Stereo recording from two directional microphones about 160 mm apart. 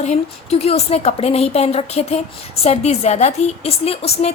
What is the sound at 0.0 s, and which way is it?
A woman's voice, 40° left (ahead or behind).